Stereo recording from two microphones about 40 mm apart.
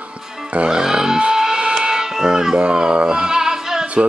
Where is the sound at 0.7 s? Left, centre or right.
Centre.